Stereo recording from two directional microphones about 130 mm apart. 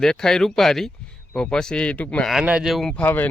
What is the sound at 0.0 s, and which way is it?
Speech, 5° left (ahead or behind).